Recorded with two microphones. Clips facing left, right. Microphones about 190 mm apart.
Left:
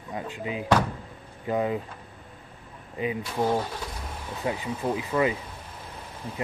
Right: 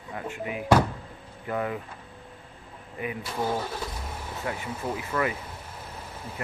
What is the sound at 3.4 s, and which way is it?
Speech, 15° left (ahead or behind).